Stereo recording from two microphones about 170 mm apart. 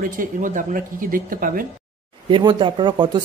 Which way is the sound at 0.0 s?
50° right (ahead or behind).